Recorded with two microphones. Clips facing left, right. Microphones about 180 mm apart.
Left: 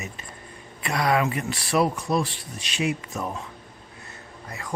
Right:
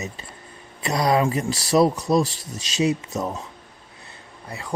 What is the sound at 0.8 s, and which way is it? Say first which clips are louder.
Speech: right 3 dB; 35° right (ahead or behind).